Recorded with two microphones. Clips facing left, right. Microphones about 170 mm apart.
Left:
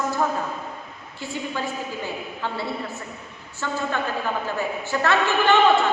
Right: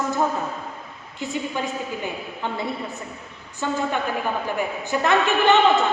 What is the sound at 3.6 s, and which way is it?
A man's voice, 15° right (ahead or behind).